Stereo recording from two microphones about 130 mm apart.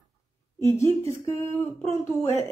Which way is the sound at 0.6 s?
20° left (ahead or behind).